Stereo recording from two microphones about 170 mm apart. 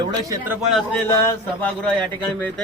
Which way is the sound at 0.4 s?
Centre (ahead or behind).